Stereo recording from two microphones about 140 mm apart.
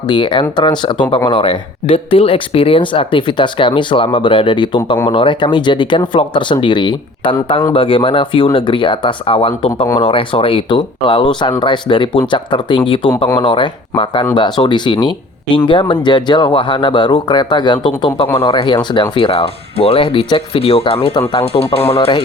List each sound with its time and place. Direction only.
0.1 s speech: 35° left (ahead or behind)